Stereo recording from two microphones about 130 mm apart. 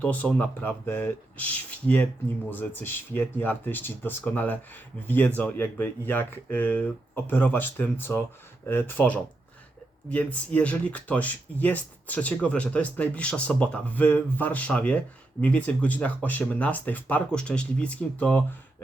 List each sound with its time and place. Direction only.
0.0 s speech: 10° left (ahead or behind)